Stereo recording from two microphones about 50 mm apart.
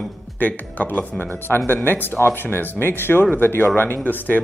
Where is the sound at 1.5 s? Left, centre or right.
Left.